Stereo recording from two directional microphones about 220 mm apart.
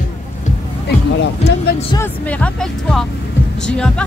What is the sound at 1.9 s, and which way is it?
Speech, 10° left (ahead or behind).